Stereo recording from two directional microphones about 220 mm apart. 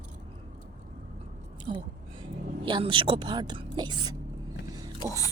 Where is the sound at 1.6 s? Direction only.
25° right (ahead or behind).